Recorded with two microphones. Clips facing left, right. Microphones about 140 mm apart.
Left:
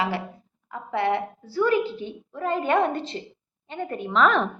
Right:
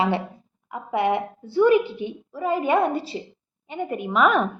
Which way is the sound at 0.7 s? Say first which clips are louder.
Right 2 dB; 15° right (ahead or behind).